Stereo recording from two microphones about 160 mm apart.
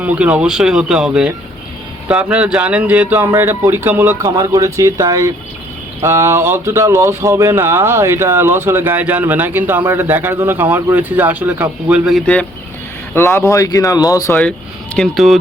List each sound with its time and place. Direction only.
0.0 s speech: 10° right (ahead or behind); by 14.3 s 20° left (ahead or behind)
14.9 s speech: centre (ahead or behind)